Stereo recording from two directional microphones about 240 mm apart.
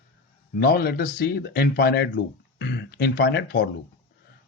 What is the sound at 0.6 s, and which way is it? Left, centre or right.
Speech, left.